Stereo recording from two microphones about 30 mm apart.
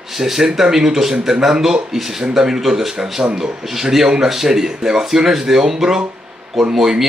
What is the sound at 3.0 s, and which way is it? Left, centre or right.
Speech, right.